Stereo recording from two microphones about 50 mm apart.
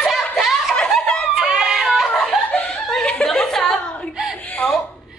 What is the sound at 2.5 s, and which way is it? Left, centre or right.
Laughter, left.